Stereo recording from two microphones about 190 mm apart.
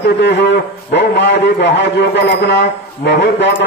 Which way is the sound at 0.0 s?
65° left (ahead or behind).